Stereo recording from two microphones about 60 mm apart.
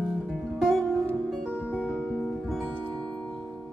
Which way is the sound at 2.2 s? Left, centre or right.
Centre.